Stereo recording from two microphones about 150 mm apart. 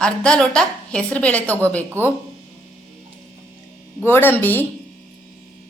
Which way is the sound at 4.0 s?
15° left (ahead or behind).